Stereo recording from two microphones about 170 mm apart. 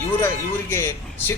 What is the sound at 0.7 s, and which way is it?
Speech, 15° left (ahead or behind).